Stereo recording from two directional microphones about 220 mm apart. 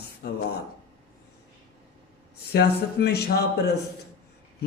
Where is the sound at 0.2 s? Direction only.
45° left (ahead or behind).